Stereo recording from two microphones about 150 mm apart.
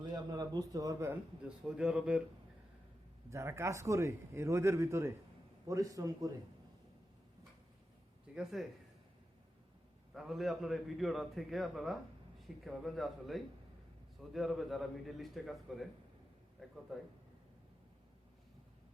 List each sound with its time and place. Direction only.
0.0 s speech: 25° right (ahead or behind)
1.5 s a man's voice: 5° right (ahead or behind)
3.2 s speech: 20° right (ahead or behind)
8.4 s a man's voice: centre (ahead or behind)
10.2 s a man's voice: centre (ahead or behind)